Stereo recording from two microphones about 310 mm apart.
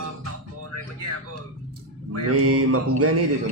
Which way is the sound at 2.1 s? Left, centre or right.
Right.